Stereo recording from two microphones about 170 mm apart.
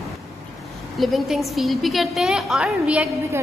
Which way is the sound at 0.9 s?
Centre (ahead or behind).